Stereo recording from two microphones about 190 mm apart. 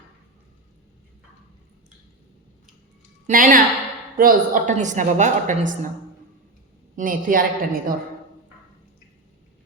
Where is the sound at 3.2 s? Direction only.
45° right (ahead or behind).